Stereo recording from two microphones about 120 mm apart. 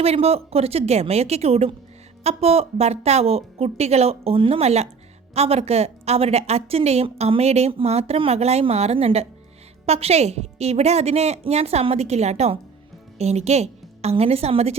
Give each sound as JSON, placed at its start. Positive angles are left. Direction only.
{"t": 0.0, "sound": "a woman's voice", "side_deg": -55}